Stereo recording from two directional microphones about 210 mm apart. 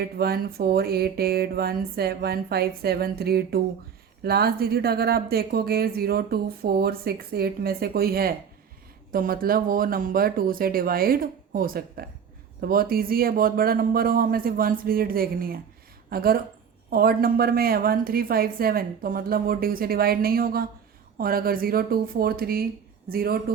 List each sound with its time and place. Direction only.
0.0 s a woman's voice: 50° right (ahead or behind)